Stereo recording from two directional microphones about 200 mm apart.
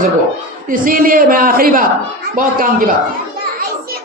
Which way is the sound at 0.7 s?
45° right (ahead or behind).